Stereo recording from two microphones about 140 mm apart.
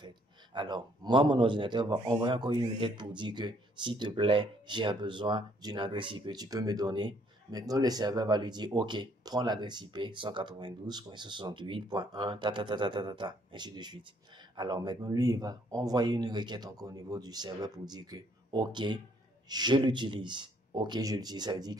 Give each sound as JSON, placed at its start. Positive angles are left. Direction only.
{"t": 0.0, "sound": "a man's voice", "side_deg": -35}